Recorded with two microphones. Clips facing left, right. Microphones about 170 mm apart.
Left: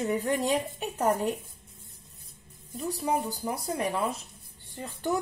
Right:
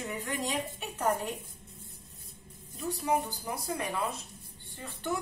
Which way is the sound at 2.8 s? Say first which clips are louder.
Left 1 dB; 35° left (ahead or behind).